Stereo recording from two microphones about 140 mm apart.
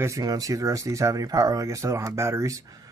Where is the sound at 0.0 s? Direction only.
25° right (ahead or behind).